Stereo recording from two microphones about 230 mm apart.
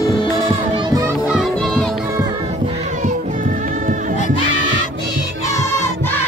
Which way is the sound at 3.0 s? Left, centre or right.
Right.